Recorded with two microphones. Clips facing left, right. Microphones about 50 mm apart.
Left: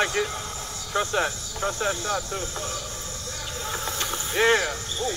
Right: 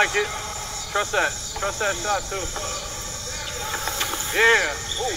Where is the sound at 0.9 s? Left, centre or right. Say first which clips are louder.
Right 2 dB; right.